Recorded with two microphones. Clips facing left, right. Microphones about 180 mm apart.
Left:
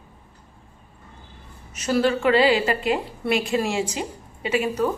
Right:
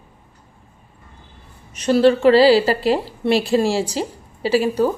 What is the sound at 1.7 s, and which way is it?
A woman's voice, 30° right (ahead or behind).